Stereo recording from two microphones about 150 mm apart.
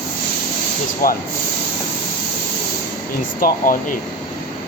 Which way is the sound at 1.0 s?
70° left (ahead or behind).